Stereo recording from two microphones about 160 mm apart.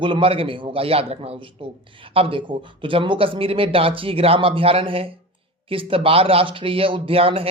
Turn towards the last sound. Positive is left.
turn(degrees=-35)  # may be behind; listen again after turning